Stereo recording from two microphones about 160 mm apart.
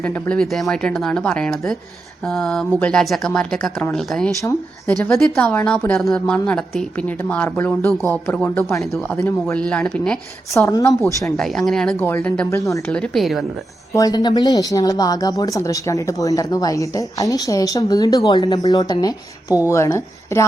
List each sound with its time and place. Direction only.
0.0 s a woman's voice: 10° left (ahead or behind)
10.5 s speech: 20° left (ahead or behind)
11.3 s a woman's voice: centre (ahead or behind); by 12.9 s 20° left (ahead or behind)
12.9 s speech: 5° left (ahead or behind)
13.9 s a woman's voice: 25° left (ahead or behind)